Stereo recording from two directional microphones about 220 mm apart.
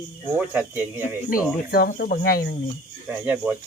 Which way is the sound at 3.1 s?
5° right (ahead or behind).